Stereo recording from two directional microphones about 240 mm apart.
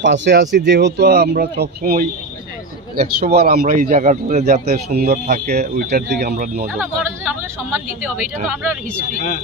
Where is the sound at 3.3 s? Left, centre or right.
Right.